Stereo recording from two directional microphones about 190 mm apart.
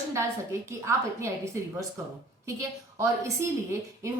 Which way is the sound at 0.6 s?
15° right (ahead or behind).